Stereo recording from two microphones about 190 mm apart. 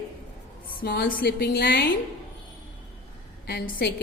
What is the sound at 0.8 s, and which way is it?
A woman's voice, 50° left (ahead or behind).